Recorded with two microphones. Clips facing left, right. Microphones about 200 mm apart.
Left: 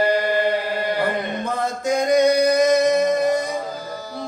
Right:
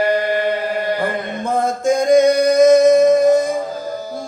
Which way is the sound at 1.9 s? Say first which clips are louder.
Right 4 dB; 50° right (ahead or behind).